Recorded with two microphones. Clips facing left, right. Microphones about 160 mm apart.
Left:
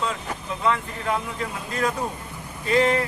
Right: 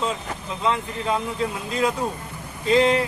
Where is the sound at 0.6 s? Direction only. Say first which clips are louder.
Right 1 dB; 20° right (ahead or behind).